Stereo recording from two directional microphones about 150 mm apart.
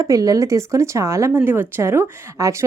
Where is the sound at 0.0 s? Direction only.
20° right (ahead or behind).